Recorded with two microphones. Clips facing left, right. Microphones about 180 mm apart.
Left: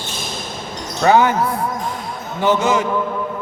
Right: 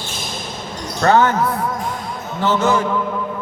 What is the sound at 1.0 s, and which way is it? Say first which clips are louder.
Speech: left 1 dB; 10° left (ahead or behind).